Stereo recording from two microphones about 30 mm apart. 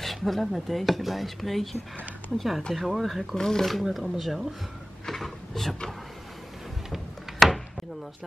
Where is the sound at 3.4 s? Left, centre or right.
Centre.